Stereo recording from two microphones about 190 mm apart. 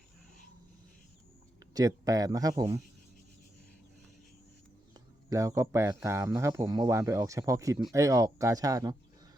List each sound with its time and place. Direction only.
1.7 s speech: 20° right (ahead or behind)
4.9 s speech: 15° right (ahead or behind)